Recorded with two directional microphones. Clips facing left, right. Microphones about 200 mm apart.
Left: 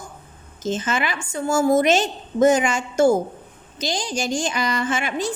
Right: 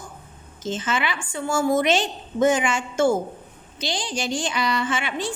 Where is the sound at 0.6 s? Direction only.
45° left (ahead or behind).